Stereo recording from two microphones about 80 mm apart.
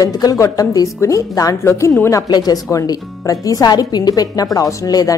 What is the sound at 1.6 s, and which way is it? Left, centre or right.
Speech, left.